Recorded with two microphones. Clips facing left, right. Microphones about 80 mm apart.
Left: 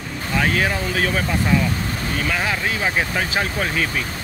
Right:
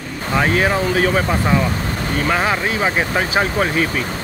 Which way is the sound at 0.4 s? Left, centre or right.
Right.